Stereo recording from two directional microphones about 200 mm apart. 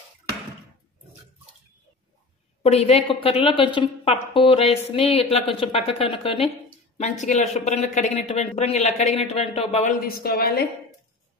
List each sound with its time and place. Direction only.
2.6 s a woman's voice: 30° left (ahead or behind)
10.0 s speech: 50° left (ahead or behind)